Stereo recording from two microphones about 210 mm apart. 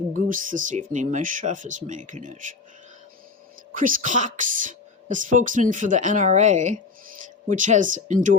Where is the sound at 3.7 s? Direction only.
40° right (ahead or behind).